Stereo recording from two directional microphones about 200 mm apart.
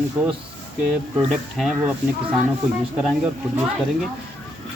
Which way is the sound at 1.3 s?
Centre (ahead or behind).